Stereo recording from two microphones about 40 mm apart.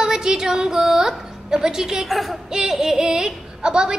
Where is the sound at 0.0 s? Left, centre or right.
Centre.